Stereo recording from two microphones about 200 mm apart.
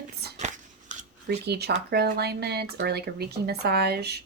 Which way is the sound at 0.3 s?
40° right (ahead or behind).